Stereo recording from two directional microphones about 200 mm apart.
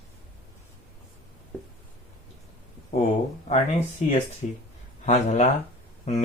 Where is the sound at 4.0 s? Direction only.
35° left (ahead or behind).